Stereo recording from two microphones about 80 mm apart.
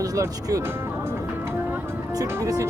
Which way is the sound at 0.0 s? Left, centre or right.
Right.